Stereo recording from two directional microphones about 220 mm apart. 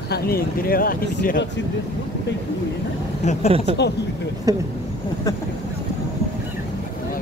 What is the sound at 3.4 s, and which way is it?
Speech, 25° right (ahead or behind).